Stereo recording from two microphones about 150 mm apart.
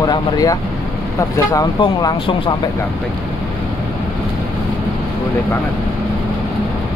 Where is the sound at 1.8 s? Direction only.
30° left (ahead or behind).